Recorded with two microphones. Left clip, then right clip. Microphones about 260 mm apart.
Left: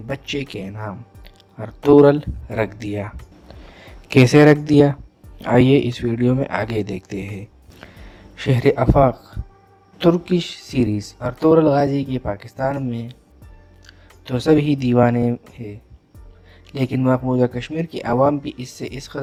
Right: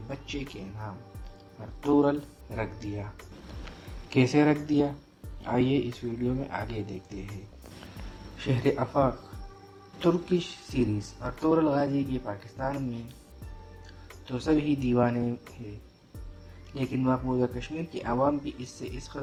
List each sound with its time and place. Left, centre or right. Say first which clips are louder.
0.1 s speech: left 12 dB; left
4.1 s speech: left 12 dB; left
8.4 s speech: left 10 dB; left
16.7 s speech: left 9 dB; left